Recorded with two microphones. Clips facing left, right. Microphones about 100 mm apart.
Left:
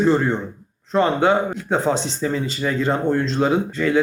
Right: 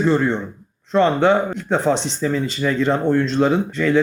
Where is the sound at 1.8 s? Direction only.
30° left (ahead or behind).